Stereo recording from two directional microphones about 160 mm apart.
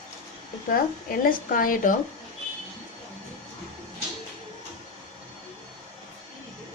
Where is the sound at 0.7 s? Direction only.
65° left (ahead or behind).